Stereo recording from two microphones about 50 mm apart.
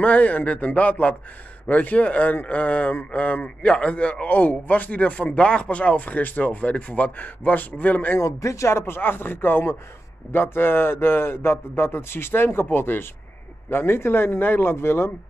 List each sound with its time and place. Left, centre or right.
0.0 s a man's voice: left
8.2 s speech: left